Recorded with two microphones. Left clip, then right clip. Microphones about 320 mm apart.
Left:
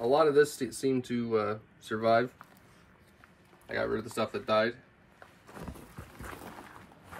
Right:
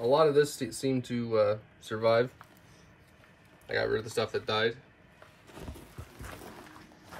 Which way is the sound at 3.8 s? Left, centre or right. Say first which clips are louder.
Right 2 dB; centre.